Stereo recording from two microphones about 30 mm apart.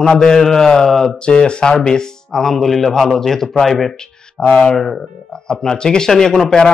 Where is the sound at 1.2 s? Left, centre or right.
Left.